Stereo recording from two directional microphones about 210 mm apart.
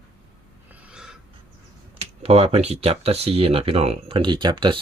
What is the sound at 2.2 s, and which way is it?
Speech, 30° right (ahead or behind).